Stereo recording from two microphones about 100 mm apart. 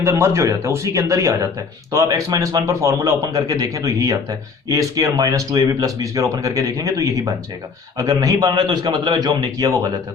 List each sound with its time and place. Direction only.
0.0 s speech: 25° right (ahead or behind)